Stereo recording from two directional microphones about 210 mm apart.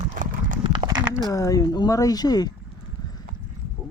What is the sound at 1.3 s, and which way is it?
Speech, 15° left (ahead or behind).